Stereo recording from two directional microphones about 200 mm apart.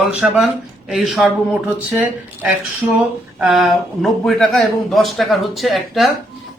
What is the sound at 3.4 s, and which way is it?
Speech, centre (ahead or behind).